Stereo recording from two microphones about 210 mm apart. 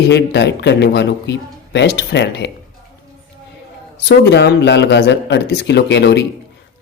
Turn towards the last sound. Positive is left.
turn(degrees=55)  # may be behind; listen again after turning